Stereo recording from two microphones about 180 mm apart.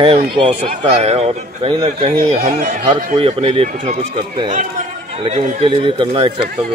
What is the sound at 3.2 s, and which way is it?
Speech, 30° right (ahead or behind).